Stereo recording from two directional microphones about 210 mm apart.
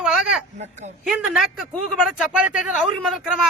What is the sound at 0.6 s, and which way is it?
Speech, 30° right (ahead or behind).